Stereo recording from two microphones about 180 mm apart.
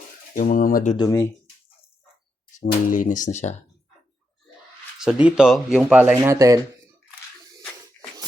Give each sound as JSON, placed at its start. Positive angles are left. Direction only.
{"t": 0.3, "sound": "speech", "side_deg": 50}
{"t": 0.9, "sound": "speech", "side_deg": 20}
{"t": 2.6, "sound": "speech", "side_deg": 50}
{"t": 4.9, "sound": "speech", "side_deg": -5}
{"t": 6.3, "sound": "speech", "side_deg": -20}